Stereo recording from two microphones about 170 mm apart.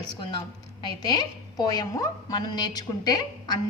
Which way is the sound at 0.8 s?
25° left (ahead or behind).